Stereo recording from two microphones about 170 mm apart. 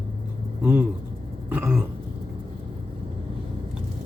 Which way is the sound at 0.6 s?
10° right (ahead or behind).